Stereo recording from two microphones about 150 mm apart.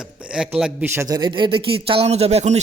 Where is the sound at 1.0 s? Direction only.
25° right (ahead or behind); by 2.6 s 45° right (ahead or behind).